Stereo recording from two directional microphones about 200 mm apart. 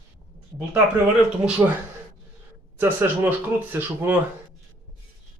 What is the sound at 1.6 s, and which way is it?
Speech, 15° right (ahead or behind).